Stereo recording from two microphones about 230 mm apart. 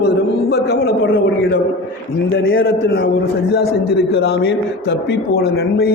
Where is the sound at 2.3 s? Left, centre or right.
Left.